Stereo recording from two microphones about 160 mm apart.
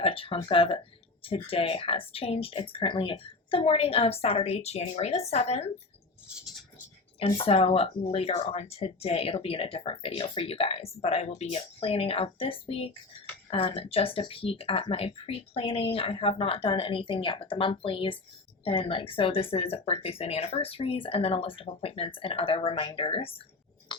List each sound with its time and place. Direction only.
0.0 s speech: 35° left (ahead or behind)
7.2 s speech: 35° left (ahead or behind)
23.9 s a sound: 30° left (ahead or behind)